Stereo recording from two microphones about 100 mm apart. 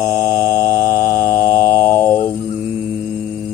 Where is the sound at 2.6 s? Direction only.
15° right (ahead or behind).